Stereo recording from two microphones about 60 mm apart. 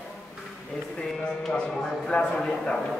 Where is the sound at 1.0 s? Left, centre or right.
Centre.